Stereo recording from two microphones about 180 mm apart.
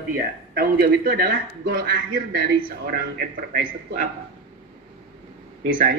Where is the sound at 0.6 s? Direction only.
55° right (ahead or behind).